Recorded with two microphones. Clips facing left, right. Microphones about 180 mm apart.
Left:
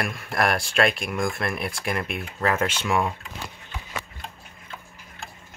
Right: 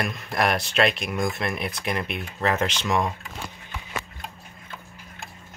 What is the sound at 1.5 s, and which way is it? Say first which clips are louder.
Speech: even; centre (ahead or behind).